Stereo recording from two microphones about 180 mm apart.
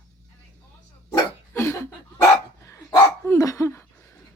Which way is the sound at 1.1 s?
15° left (ahead or behind).